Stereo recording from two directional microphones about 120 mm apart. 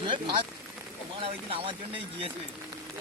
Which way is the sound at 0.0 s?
40° right (ahead or behind).